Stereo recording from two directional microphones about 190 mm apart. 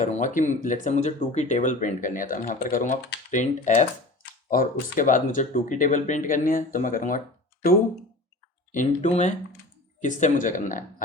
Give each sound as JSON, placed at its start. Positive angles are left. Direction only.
{"t": 0.0, "sound": "speech", "side_deg": 40}
{"t": 8.7, "sound": "speech", "side_deg": 40}